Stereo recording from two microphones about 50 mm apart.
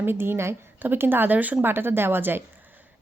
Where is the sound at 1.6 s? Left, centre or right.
Right.